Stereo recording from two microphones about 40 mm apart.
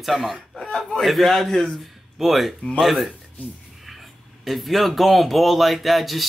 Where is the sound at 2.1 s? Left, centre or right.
Centre.